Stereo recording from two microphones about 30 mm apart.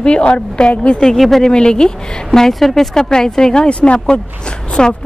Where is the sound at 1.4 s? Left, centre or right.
Left.